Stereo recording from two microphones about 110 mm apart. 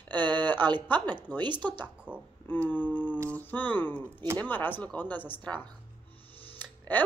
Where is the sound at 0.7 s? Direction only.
45° right (ahead or behind).